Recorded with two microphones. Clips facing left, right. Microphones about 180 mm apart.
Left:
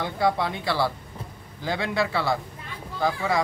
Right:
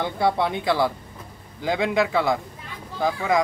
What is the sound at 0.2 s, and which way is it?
Speech, 20° right (ahead or behind).